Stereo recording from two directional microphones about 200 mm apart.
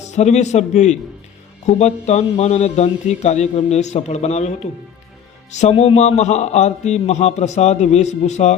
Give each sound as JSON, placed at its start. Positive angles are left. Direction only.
{"t": 0.1, "sound": "a man's voice", "side_deg": 35}